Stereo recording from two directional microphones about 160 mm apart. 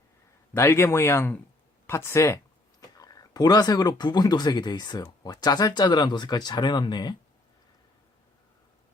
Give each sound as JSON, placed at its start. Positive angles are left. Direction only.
{"t": 0.5, "sound": "speech", "side_deg": 15}